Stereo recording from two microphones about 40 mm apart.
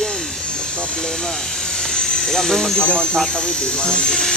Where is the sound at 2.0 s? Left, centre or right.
Centre.